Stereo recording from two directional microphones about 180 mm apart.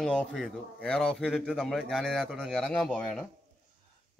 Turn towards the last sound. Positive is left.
turn(degrees=0)  # may be behind; listen again after turning